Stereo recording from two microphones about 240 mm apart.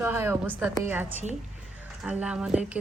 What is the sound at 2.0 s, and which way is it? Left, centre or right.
Speech, centre.